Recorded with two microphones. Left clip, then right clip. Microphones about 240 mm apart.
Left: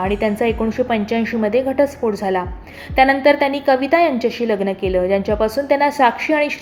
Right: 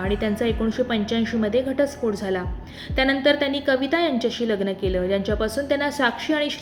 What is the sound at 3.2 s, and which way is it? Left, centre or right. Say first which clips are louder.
A woman's voice: left 6 dB; left.